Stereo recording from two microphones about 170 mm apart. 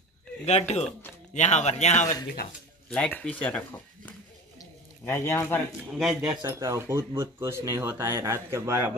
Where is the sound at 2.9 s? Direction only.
5° left (ahead or behind).